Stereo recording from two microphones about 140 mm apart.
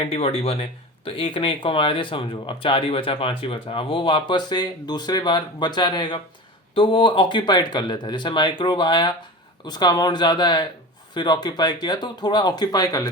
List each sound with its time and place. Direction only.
0.0 s speech: 45° left (ahead or behind); by 13.1 s 25° left (ahead or behind)